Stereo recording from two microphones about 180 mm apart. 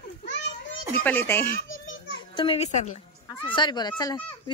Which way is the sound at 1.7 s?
90° left.